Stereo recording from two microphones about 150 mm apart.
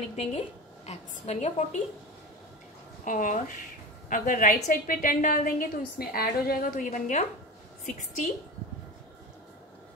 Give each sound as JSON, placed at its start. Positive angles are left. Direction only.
{"t": 0.0, "sound": "a woman's voice", "side_deg": 45}
{"t": 3.1, "sound": "a woman's voice", "side_deg": 65}